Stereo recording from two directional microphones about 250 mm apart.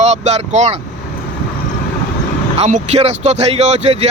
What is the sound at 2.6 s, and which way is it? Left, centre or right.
Speech, right.